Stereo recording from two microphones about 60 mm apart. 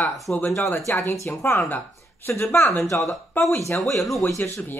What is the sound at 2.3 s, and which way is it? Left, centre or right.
Speech, left.